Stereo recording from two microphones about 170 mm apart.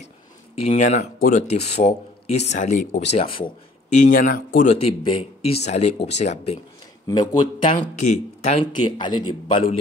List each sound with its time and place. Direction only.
0.6 s speech: 40° left (ahead or behind)
3.1 s speech: 35° left (ahead or behind)
4.0 s speech: 55° left (ahead or behind)
4.6 s speech: 35° left (ahead or behind)
7.1 s speech: 30° left (ahead or behind)
8.0 s speech: 40° left (ahead or behind)
8.8 s speech: 25° left (ahead or behind)